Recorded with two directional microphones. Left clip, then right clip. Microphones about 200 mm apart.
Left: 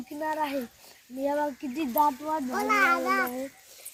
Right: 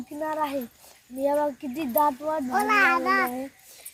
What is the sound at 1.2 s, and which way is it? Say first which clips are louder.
Speech: right 4 dB; 25° right (ahead or behind).